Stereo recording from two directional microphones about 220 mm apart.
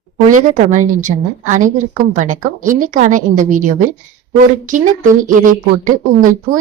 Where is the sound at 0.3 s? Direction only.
35° right (ahead or behind).